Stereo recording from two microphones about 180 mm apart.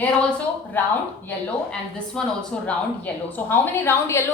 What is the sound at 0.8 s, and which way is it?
Speech, 10° left (ahead or behind).